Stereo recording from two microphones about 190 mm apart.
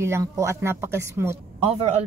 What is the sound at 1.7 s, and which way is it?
Speech, 35° right (ahead or behind).